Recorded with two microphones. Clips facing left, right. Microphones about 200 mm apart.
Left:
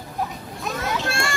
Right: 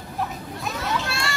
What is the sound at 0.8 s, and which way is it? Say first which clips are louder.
Children playing: left 2 dB; 50° left (ahead or behind).